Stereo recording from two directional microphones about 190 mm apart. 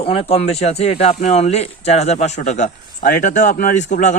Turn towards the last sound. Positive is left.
turn(degrees=40)  # may be behind; listen again after turning